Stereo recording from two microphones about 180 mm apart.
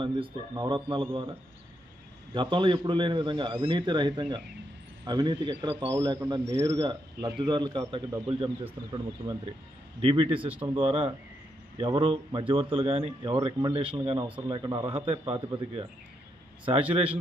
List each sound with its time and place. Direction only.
0.0 s a man's voice: 25° right (ahead or behind)
2.3 s a man's voice: 25° right (ahead or behind)